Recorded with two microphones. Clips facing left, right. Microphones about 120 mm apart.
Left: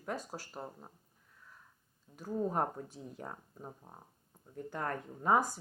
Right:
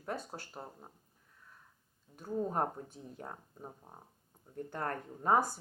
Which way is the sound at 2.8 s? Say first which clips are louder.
Left 2 dB; 35° right (ahead or behind).